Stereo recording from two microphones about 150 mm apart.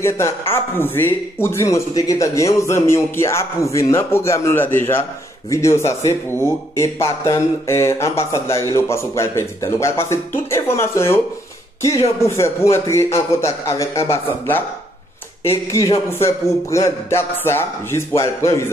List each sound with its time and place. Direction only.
0.5 s a man's voice: 15° left (ahead or behind)
16.1 s a man's voice: 20° left (ahead or behind)